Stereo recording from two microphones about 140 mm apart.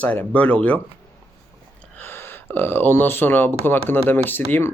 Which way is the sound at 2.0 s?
15° left (ahead or behind).